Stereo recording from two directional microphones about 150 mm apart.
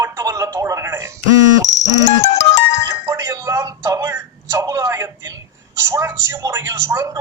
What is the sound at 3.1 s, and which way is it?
A man's voice, 20° right (ahead or behind).